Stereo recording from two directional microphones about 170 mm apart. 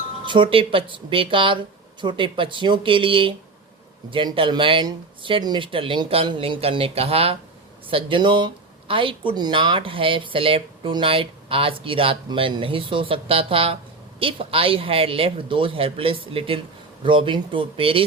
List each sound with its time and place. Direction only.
0.3 s speech: 30° right (ahead or behind)